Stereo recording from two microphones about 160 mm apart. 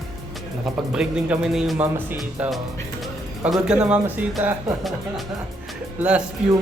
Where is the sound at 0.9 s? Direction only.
5° right (ahead or behind).